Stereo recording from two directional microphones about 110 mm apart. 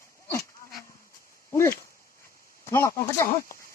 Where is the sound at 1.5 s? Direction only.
25° left (ahead or behind).